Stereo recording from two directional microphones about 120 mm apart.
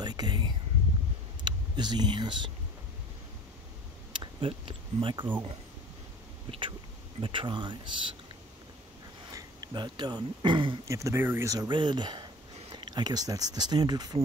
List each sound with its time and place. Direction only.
0.0 s a sound: 35° right (ahead or behind)
1.4 s speech: 35° right (ahead or behind)
4.1 s speech: 45° right (ahead or behind)
7.2 s speech: 45° right (ahead or behind)
9.3 s speech: 35° right (ahead or behind)
10.9 s speech: 25° right (ahead or behind)